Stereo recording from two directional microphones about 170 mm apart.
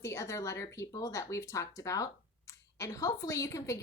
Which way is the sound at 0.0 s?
15° left (ahead or behind).